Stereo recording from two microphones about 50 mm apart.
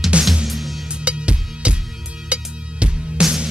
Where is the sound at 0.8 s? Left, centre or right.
Right.